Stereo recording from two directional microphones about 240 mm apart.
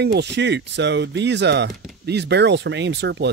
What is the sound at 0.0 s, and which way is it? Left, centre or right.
Speech, right.